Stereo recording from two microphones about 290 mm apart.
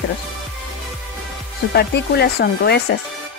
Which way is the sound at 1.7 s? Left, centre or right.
Left.